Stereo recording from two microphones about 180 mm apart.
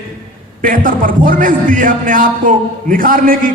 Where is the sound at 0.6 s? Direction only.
50° right (ahead or behind).